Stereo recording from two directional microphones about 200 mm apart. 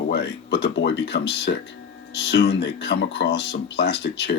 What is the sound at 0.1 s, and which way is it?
Speech, 60° left (ahead or behind).